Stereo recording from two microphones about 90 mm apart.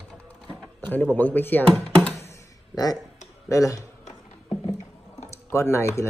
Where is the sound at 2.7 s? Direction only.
45° left (ahead or behind).